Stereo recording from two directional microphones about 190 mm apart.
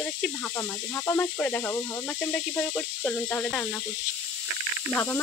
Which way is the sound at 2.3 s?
5° left (ahead or behind).